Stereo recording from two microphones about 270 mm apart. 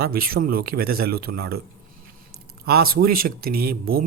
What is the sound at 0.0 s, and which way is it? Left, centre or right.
Speech, right.